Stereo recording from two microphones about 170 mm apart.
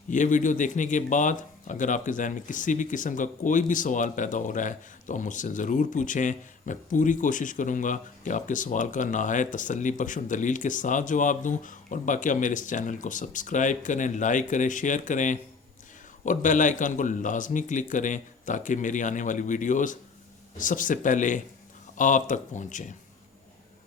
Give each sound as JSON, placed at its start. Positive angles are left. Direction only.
{"t": 0.1, "sound": "speech", "side_deg": 50}